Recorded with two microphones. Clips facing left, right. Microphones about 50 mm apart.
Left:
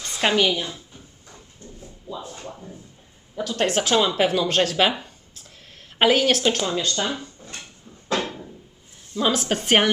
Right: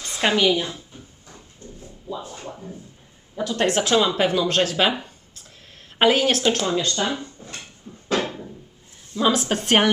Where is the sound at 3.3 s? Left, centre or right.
Centre.